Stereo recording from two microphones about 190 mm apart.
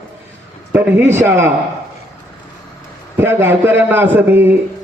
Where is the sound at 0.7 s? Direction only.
10° right (ahead or behind).